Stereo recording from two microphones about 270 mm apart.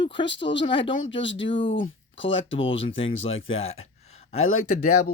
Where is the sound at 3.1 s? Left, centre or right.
Left.